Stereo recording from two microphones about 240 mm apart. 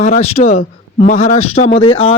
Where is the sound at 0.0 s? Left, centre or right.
Left.